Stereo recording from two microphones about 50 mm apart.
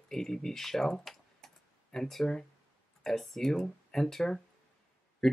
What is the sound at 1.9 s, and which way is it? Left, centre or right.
Speech, centre.